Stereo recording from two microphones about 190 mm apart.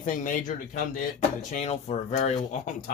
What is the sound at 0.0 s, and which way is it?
Speech, 45° left (ahead or behind).